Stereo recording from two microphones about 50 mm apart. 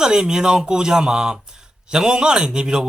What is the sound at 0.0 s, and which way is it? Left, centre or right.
A man's voice, centre.